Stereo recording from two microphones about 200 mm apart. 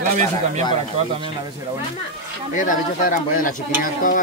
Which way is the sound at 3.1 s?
40° left (ahead or behind).